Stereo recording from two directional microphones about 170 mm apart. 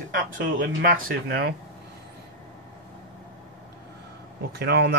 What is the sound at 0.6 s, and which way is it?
Speech, 65° right (ahead or behind).